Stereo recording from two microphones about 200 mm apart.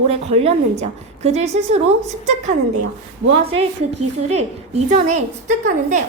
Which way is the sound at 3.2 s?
30° right (ahead or behind).